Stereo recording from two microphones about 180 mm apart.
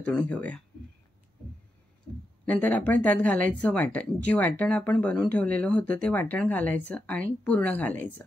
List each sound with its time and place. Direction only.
0.0 s speech: 5° left (ahead or behind)
2.4 s speech: 10° left (ahead or behind)